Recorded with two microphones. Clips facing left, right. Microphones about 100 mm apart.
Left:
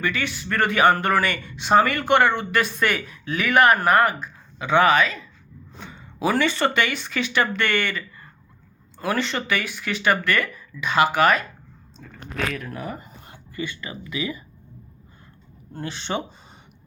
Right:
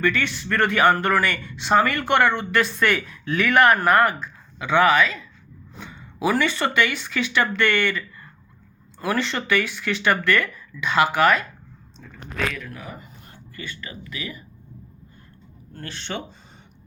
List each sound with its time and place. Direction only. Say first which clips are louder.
0.0 s speech: right 3 dB; 10° left (ahead or behind)
6.2 s speech: left 1 dB; 25° left (ahead or behind)
12.5 s speech: left 3 dB; 35° left (ahead or behind)
13.3 s speech: left 6 dB; 20° left (ahead or behind)
15.7 s speech: left 4 dB; 15° left (ahead or behind)